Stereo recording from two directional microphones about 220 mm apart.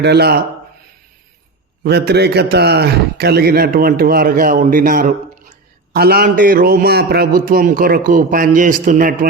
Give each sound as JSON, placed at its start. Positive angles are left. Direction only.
{"t": 0.0, "sound": "a man's voice", "side_deg": -50}
{"t": 1.8, "sound": "a man's voice", "side_deg": -50}